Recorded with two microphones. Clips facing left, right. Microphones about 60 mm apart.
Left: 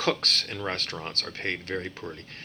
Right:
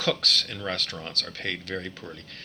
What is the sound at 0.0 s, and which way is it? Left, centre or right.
Speech, left.